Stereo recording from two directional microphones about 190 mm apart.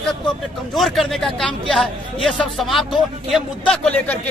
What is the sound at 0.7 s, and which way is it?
Speech, centre (ahead or behind).